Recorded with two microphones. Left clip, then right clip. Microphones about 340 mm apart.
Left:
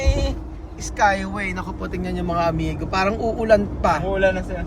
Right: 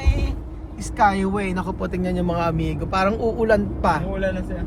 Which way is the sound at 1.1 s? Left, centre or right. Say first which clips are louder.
Even; centre.